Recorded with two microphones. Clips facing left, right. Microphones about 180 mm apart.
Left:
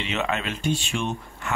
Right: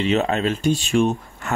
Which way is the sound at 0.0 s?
35° right (ahead or behind).